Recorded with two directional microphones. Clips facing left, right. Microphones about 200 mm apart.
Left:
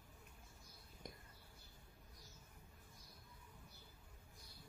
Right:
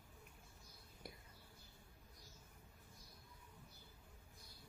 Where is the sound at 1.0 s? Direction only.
10° right (ahead or behind).